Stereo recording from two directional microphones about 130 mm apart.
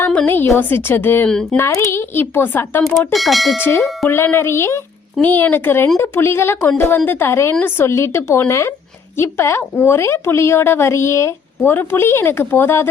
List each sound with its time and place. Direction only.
0.0 s music: 10° left (ahead or behind)
1.3 s bell: 5° left (ahead or behind)
1.5 s a woman's voice: 20° left (ahead or behind)
3.1 s bell: centre (ahead or behind)
3.6 s a woman's voice: 20° left (ahead or behind)
5.2 s music: 15° left (ahead or behind)
6.0 s a woman's voice: 20° left (ahead or behind)
6.7 s music: 15° left (ahead or behind)
7.6 s a woman's voice: 20° left (ahead or behind)